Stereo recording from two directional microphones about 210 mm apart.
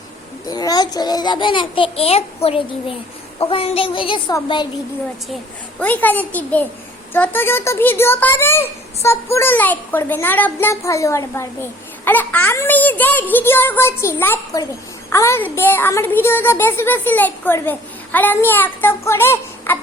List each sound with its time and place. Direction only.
0.4 s a child's voice: 20° left (ahead or behind)
5.8 s a child's voice: 10° left (ahead or behind)